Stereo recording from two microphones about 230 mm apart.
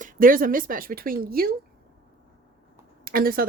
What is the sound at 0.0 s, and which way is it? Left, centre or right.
Speech, right.